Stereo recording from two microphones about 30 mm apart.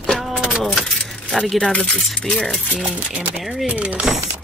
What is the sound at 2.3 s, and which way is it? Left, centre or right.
Speech, centre.